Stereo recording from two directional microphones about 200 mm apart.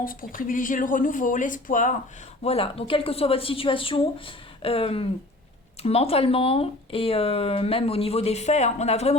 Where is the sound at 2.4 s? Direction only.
30° left (ahead or behind).